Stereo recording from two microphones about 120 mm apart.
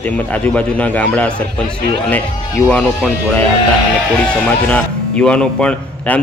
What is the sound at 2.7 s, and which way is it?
A man's voice, 5° left (ahead or behind).